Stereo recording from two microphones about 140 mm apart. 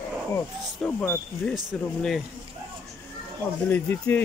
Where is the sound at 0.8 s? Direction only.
10° left (ahead or behind).